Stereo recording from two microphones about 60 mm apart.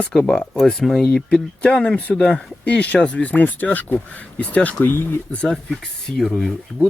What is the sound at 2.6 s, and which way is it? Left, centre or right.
Speech, left.